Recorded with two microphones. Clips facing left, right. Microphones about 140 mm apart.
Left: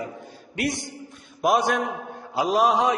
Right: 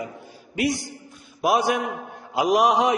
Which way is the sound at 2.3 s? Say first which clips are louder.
Right 2 dB; 15° right (ahead or behind).